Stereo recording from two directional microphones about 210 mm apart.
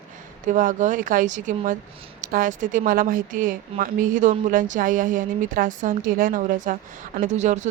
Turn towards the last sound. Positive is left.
turn(degrees=-35)  # may be behind; listen again after turning